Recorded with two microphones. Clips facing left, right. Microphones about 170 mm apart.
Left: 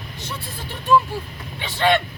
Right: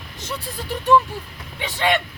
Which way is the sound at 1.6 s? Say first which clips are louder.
Left 2 dB; 15° right (ahead or behind).